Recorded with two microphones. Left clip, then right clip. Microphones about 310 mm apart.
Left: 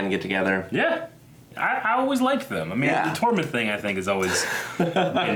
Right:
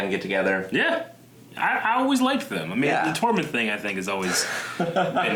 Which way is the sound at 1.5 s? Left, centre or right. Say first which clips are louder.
Even; left.